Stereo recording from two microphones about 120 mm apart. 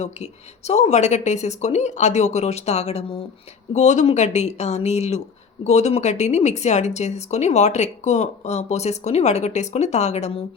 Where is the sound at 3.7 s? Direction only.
75° left (ahead or behind).